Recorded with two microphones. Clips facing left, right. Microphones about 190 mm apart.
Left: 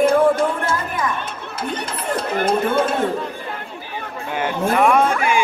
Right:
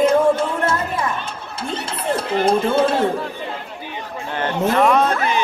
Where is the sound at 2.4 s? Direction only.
25° right (ahead or behind).